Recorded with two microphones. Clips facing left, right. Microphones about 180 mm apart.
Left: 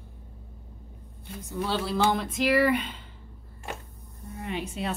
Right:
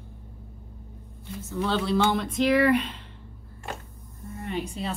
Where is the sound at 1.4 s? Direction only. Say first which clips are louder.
Right 2 dB; 10° left (ahead or behind).